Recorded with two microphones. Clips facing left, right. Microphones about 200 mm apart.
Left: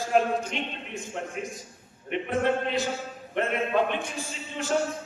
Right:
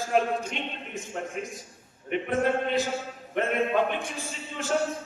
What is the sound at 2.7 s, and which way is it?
A man's voice, centre (ahead or behind).